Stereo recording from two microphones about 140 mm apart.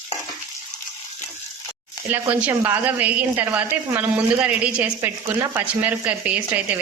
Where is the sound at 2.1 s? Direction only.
10° right (ahead or behind).